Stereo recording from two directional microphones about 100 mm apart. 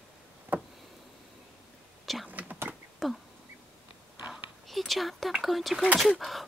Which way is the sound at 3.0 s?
Centre (ahead or behind).